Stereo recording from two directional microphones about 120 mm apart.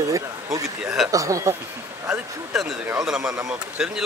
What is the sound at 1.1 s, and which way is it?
Speech, 25° right (ahead or behind).